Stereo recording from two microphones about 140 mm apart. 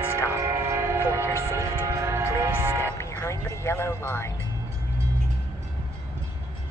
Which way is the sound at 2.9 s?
20° left (ahead or behind).